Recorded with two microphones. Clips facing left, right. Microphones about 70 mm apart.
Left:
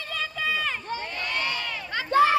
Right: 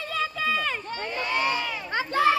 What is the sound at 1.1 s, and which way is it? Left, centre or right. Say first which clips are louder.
Crowd: right 7 dB; centre.